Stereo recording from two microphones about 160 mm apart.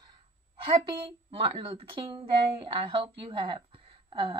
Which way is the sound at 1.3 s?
35° right (ahead or behind).